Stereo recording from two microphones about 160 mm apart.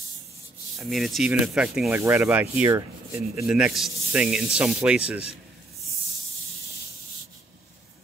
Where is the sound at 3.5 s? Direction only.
Centre (ahead or behind).